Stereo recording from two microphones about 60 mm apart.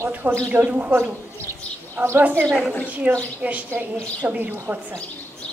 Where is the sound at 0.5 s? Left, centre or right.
Right.